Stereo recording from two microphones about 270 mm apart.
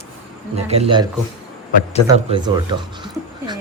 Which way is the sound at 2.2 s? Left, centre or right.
Centre.